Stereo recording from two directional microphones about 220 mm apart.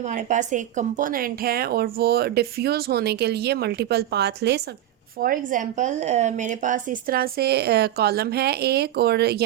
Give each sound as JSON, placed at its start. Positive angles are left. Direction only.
{"t": 0.0, "sound": "a woman's voice", "side_deg": -35}
{"t": 5.2, "sound": "a woman's voice", "side_deg": -40}